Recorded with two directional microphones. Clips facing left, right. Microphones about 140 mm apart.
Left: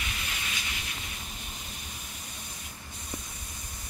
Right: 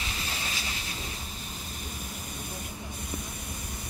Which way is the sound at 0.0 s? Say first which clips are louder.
Right 2 dB; 30° right (ahead or behind).